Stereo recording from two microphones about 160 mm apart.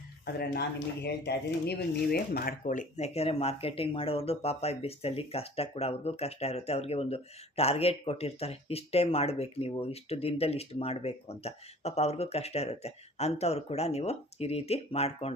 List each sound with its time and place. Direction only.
1.0 s speech: 90° left; by 15.3 s 40° left (ahead or behind)